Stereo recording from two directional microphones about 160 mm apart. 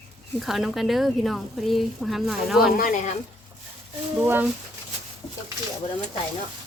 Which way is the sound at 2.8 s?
55° left (ahead or behind).